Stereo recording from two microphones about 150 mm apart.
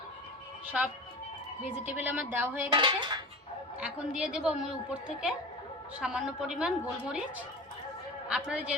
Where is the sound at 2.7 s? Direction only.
30° right (ahead or behind).